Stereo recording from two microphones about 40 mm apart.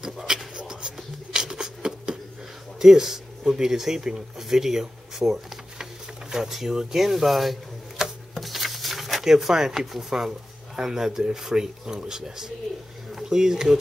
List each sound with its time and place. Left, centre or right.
0.0 s speech: centre
0.6 s writing: centre
2.8 s speech: centre
8.0 s a sound: centre
10.8 s speech: centre